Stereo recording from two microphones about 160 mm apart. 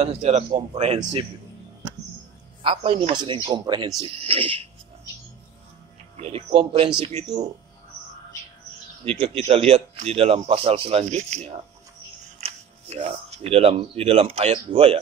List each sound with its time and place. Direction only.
0.0 s speech: 40° right (ahead or behind)
2.6 s speech: 35° right (ahead or behind)
6.1 s speech: 35° right (ahead or behind)
9.0 s speech: 35° right (ahead or behind)